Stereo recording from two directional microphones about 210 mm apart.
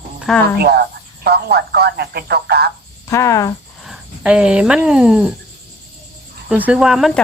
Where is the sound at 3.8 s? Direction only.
5° right (ahead or behind).